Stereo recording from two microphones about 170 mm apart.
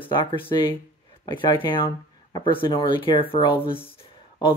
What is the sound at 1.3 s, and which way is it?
Speech, 30° left (ahead or behind).